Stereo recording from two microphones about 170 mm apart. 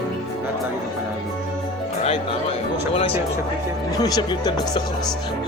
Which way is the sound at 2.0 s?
35° left (ahead or behind).